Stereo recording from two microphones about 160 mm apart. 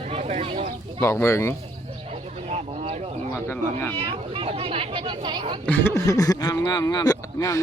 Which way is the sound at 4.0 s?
35° right (ahead or behind).